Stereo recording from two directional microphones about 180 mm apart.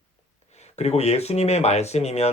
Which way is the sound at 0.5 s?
35° left (ahead or behind).